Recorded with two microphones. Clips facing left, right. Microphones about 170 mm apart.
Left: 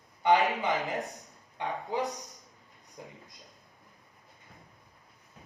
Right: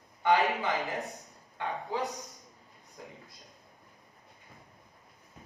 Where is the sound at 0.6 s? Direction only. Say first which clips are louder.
Left 2 dB; 20° left (ahead or behind).